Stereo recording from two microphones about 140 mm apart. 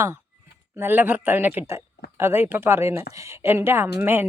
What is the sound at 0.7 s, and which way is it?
Speech, 15° right (ahead or behind).